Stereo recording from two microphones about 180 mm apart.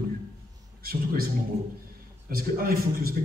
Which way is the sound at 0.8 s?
55° right (ahead or behind).